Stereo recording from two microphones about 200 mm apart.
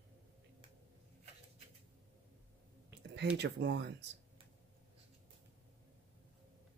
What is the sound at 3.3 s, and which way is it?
Speech, 60° right (ahead or behind).